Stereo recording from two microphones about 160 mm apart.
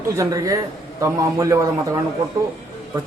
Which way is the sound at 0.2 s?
20° right (ahead or behind).